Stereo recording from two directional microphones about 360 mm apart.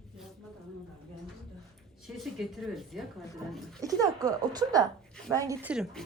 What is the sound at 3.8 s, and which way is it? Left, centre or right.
Speech, centre.